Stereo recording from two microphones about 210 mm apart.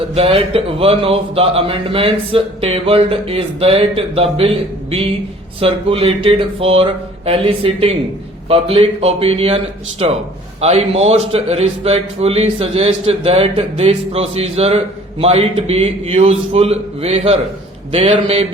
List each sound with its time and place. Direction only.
0.1 s a man's voice: 30° right (ahead or behind)